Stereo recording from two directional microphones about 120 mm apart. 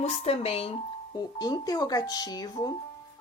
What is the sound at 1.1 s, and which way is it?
A woman's voice, 35° left (ahead or behind).